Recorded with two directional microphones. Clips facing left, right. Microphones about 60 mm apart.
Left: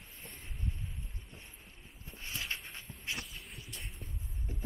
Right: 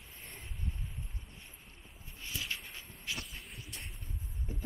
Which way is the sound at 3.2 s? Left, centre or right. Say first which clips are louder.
Even; centre.